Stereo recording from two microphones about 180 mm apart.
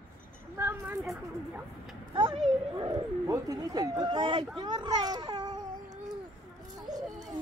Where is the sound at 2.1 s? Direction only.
30° right (ahead or behind).